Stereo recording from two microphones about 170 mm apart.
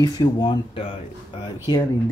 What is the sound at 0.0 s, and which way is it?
Speech, 25° left (ahead or behind).